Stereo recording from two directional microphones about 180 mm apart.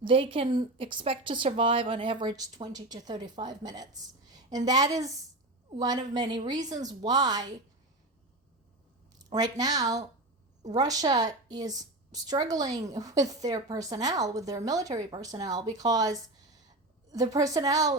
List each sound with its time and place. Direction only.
0.0 s a woman's voice: 30° right (ahead or behind)
9.1 s a woman's voice: 20° right (ahead or behind)
16.6 s a sound: 20° right (ahead or behind)